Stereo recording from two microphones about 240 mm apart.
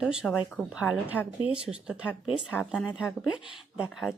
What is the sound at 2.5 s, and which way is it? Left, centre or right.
A woman's voice, centre.